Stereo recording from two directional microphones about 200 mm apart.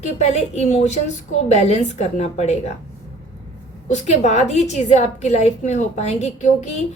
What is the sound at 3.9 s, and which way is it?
A woman's voice, 35° left (ahead or behind).